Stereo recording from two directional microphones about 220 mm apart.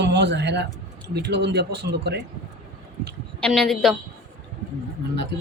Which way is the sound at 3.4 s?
Centre (ahead or behind).